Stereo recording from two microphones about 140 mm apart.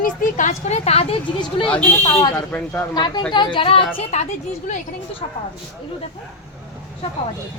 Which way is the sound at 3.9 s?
55° left (ahead or behind).